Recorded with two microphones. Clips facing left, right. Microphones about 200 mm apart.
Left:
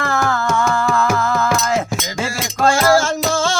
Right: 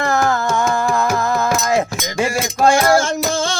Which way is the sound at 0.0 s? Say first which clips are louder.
Right 2 dB; 20° right (ahead or behind).